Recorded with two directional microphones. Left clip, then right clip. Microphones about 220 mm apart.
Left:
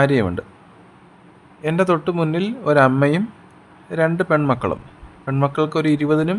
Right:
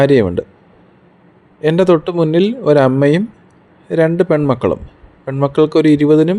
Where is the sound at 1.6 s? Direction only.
15° right (ahead or behind).